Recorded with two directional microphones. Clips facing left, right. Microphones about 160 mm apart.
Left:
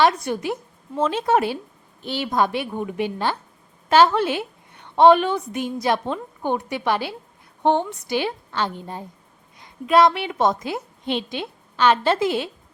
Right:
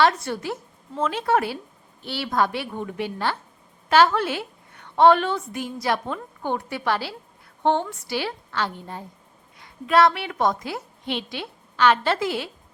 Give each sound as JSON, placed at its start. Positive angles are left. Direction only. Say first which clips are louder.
{"t": 0.0, "sound": "a woman's voice", "louder": "left 2 dB", "side_deg": 15}